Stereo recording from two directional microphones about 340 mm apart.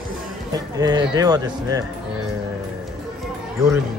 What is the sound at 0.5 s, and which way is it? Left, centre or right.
Speech, centre.